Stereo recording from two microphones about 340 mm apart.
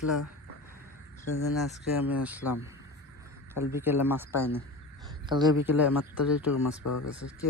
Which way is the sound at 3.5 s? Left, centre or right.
Centre.